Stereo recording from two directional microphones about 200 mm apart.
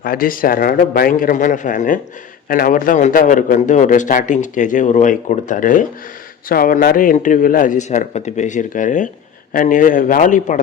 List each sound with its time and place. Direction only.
0.0 s a man's voice: 45° left (ahead or behind)